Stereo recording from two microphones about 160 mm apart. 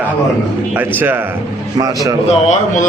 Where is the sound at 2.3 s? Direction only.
50° left (ahead or behind).